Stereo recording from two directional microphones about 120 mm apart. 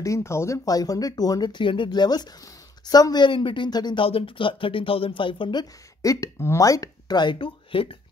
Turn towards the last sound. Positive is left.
turn(degrees=45)  # may be behind; listen again after turning